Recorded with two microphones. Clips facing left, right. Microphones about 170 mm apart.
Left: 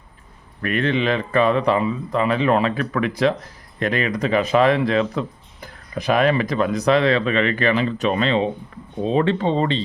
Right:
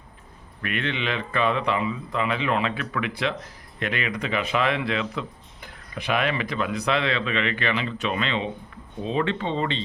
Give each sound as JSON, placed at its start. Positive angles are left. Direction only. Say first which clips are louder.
{"t": 0.6, "sound": "speech", "louder": "left 8 dB", "side_deg": 40}